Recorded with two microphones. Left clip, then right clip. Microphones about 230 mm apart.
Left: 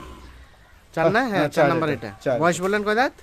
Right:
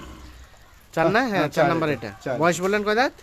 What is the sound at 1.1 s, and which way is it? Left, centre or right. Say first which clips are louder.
Speech: left 1 dB; centre.